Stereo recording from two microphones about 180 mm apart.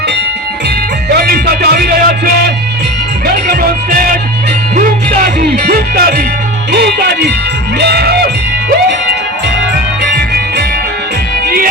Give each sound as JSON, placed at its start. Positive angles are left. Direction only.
{"t": 1.1, "sound": "music", "side_deg": -60}
{"t": 3.4, "sound": "music", "side_deg": -60}
{"t": 5.4, "sound": "speech", "side_deg": -55}
{"t": 7.8, "sound": "music", "side_deg": -65}
{"t": 10.2, "sound": "music", "side_deg": -65}